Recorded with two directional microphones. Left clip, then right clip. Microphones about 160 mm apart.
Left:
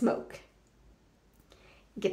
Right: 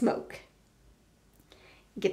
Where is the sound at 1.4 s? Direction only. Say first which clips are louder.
Right 2 dB; 20° right (ahead or behind).